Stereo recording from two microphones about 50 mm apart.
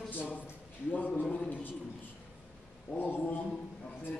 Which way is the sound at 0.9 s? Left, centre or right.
Left.